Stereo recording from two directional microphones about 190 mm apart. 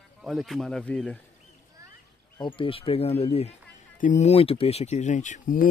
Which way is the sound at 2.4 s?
30° left (ahead or behind).